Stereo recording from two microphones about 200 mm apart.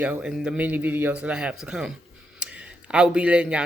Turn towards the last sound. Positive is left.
turn(degrees=-5)  # may be behind; listen again after turning